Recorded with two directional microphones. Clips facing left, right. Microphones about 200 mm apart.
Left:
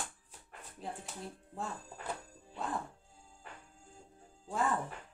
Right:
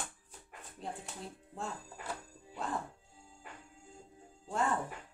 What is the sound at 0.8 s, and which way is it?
Speech, centre (ahead or behind).